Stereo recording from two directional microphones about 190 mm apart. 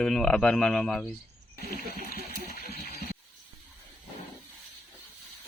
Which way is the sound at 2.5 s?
55° left (ahead or behind).